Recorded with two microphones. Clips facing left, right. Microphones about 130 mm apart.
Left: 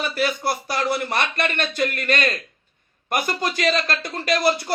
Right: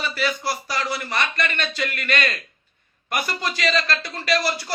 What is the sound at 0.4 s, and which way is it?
A man's voice, 55° left (ahead or behind).